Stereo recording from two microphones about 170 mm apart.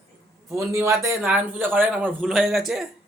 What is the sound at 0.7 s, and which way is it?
Speech, 15° right (ahead or behind).